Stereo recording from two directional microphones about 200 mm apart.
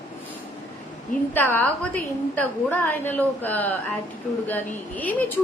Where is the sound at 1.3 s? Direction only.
10° left (ahead or behind).